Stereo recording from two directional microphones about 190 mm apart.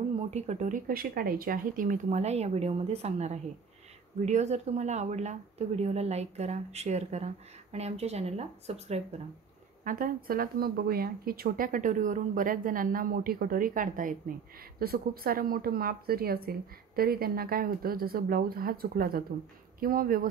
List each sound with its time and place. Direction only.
0.3 s speech: 35° right (ahead or behind)
9.8 s speech: 45° right (ahead or behind)